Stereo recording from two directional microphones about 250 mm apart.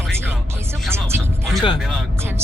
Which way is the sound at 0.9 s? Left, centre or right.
Centre.